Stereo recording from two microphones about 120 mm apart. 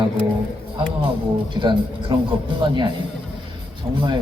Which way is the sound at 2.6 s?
40° right (ahead or behind).